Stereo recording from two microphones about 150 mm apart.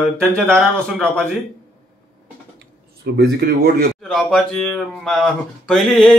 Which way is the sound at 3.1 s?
90° right.